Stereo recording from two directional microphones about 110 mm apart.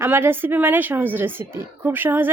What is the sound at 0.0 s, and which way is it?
A woman's voice, 20° right (ahead or behind).